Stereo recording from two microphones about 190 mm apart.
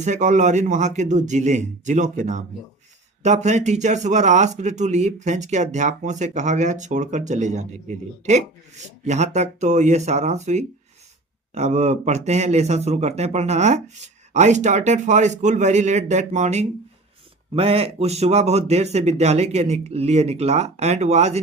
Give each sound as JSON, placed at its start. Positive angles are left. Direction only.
{"t": 0.0, "sound": "speech", "side_deg": -40}